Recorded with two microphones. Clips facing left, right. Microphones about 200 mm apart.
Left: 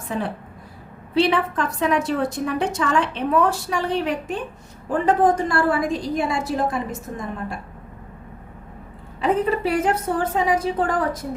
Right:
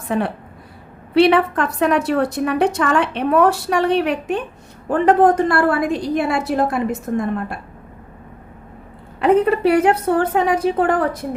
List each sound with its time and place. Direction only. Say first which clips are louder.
0.1 s a woman's voice: right 6 dB; 65° right (ahead or behind)
9.2 s a woman's voice: right 6 dB; 65° right (ahead or behind)